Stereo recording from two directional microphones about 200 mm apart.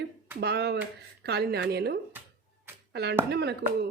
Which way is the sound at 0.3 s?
55° right (ahead or behind).